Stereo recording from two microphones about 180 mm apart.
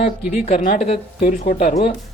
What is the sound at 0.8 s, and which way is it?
A man's voice, 35° left (ahead or behind).